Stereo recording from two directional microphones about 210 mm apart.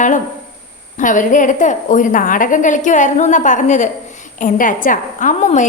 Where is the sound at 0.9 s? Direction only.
40° left (ahead or behind).